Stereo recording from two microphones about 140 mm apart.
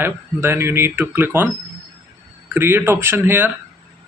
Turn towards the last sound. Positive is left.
turn(degrees=-15)  # may be behind; listen again after turning